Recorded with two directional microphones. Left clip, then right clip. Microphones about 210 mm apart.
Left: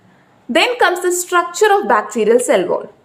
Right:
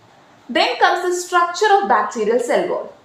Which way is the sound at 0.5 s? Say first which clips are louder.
Left 2 dB; 45° left (ahead or behind).